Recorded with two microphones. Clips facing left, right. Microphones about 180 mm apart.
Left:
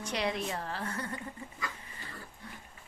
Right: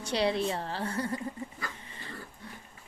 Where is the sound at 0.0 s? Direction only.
30° right (ahead or behind).